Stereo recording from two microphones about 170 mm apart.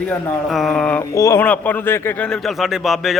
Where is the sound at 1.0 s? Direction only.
20° left (ahead or behind); by 3.1 s centre (ahead or behind).